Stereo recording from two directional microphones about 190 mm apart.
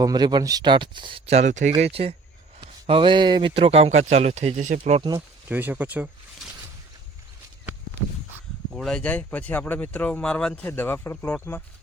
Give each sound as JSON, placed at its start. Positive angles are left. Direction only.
{"t": 0.0, "sound": "speech", "side_deg": -20}
{"t": 5.5, "sound": "speech", "side_deg": -10}
{"t": 8.7, "sound": "speech", "side_deg": 5}